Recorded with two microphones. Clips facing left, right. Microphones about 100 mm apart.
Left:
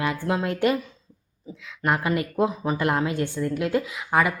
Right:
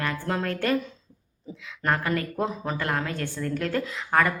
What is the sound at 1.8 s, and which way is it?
Speech, 10° left (ahead or behind).